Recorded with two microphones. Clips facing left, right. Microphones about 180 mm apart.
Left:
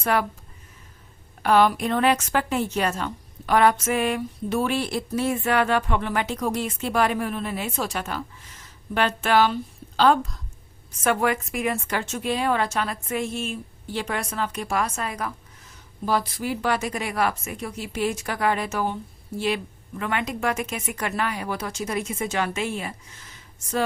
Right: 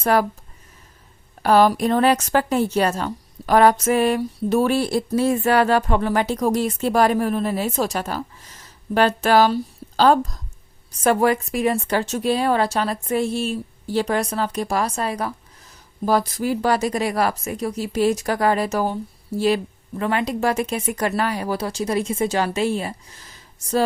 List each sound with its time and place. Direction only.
0.0 s a woman's voice: 40° right (ahead or behind)
1.4 s a woman's voice: 35° right (ahead or behind)